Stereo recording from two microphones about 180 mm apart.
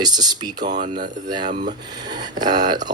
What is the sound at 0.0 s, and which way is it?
Speech, 25° right (ahead or behind).